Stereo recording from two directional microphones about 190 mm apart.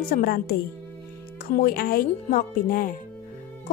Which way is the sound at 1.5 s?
50° left (ahead or behind).